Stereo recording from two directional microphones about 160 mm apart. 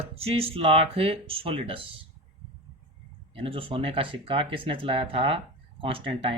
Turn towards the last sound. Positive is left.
turn(degrees=-35)  # may be behind; listen again after turning